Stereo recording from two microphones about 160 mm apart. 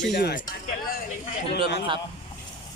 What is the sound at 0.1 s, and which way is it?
Speech, 90° left.